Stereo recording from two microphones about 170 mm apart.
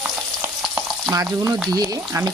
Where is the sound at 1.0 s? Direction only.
20° right (ahead or behind).